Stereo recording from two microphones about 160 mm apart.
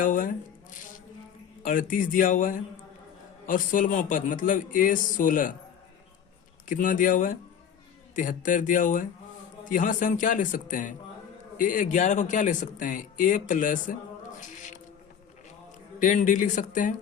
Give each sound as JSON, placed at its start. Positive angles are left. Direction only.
{"t": 0.0, "sound": "speech", "side_deg": 55}
{"t": 6.7, "sound": "speech", "side_deg": 55}
{"t": 16.0, "sound": "speech", "side_deg": 50}